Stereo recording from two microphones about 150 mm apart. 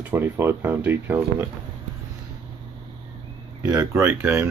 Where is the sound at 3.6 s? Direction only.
20° right (ahead or behind).